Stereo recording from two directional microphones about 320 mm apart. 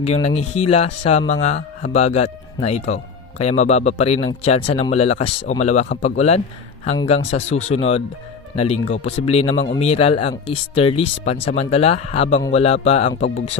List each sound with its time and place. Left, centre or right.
0.0 s speech: centre